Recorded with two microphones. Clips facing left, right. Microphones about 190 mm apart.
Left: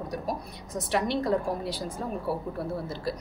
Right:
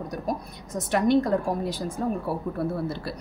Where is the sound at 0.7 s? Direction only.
50° right (ahead or behind).